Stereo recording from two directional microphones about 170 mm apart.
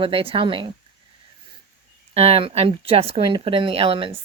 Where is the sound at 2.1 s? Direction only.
35° right (ahead or behind).